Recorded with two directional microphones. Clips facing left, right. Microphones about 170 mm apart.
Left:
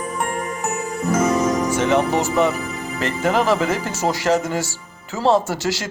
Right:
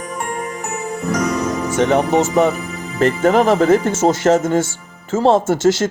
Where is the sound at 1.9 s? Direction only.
40° right (ahead or behind).